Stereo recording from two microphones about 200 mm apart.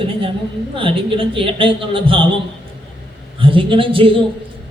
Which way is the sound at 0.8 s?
25° right (ahead or behind).